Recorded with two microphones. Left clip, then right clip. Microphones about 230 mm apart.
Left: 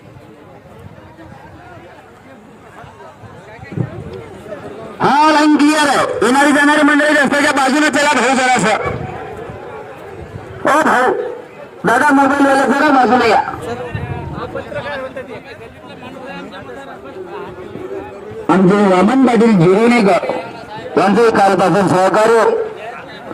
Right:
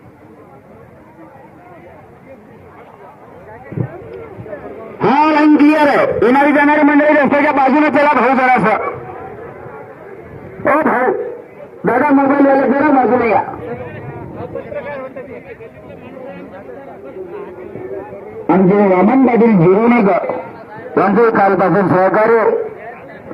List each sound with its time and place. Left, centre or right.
4.9 s a sound: left
10.6 s duck: left
11.8 s a man's voice: left
18.4 s a man's voice: left